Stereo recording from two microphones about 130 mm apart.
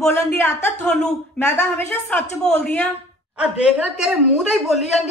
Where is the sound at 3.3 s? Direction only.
10° right (ahead or behind).